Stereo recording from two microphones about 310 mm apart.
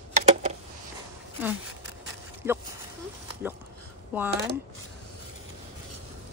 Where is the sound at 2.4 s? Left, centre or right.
Centre.